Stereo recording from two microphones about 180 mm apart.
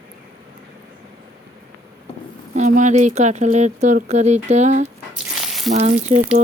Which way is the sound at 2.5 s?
40° right (ahead or behind).